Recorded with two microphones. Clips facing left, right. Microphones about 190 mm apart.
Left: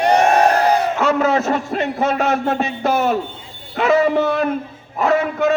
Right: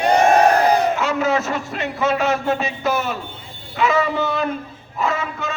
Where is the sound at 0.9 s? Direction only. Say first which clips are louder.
Left 3 dB; 55° left (ahead or behind).